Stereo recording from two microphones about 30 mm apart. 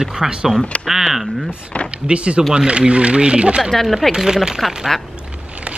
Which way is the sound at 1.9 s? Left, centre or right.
Right.